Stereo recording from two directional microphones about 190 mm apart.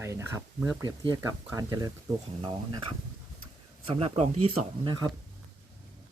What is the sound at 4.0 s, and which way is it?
Speech, 30° right (ahead or behind).